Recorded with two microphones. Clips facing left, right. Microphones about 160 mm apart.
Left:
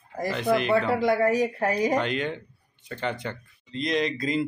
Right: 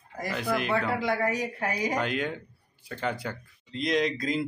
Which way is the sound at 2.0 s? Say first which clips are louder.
Left 2 dB; 5° right (ahead or behind).